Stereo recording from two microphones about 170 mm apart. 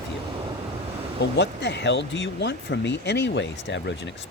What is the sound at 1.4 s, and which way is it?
Speech, 90° left.